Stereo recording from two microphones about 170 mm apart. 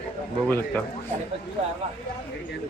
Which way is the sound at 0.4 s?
10° left (ahead or behind).